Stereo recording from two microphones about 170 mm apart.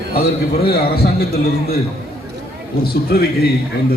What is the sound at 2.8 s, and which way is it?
Speech, 65° left (ahead or behind).